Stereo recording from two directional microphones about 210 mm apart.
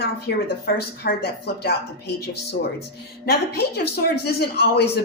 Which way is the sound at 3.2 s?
50° left (ahead or behind).